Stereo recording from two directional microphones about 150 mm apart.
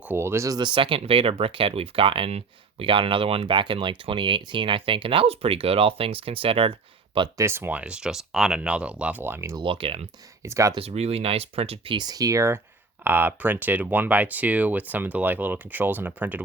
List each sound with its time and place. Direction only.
0.0 s speech: 15° right (ahead or behind); by 7.3 s 35° right (ahead or behind)
7.3 s speech: 15° right (ahead or behind)
9.6 s speech: 35° right (ahead or behind)
10.4 s speech: 20° right (ahead or behind)
10.8 s speech: 40° right (ahead or behind); by 16.4 s 10° right (ahead or behind)